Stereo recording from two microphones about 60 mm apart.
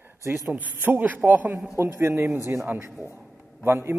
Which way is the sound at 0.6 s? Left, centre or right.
Right.